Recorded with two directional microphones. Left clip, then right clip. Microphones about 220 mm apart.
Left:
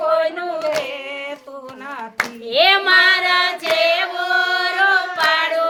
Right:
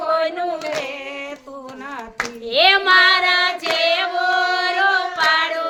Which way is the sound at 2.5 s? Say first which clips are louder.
Even; centre (ahead or behind).